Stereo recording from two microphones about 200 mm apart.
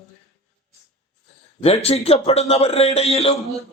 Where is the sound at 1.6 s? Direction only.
30° left (ahead or behind).